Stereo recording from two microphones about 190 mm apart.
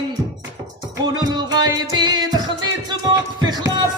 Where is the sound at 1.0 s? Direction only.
20° right (ahead or behind).